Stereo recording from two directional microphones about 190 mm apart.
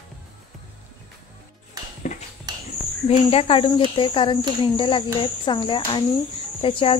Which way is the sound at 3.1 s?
30° left (ahead or behind).